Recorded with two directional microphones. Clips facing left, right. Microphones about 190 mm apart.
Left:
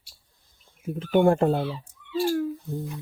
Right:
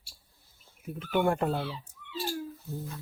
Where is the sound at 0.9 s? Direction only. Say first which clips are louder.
Left 7 dB; 30° left (ahead or behind).